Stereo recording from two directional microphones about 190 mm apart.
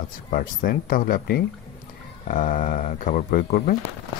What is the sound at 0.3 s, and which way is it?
Speech, 45° left (ahead or behind).